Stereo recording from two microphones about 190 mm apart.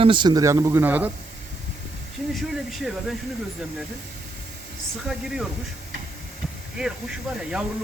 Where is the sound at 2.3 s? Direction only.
Centre (ahead or behind).